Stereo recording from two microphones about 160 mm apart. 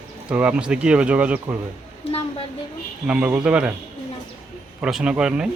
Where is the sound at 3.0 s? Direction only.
5° right (ahead or behind).